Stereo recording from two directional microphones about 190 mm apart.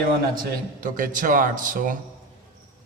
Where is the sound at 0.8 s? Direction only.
45° right (ahead or behind).